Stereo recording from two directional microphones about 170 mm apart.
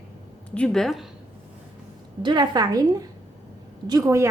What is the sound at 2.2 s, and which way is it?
A woman's voice, 25° right (ahead or behind).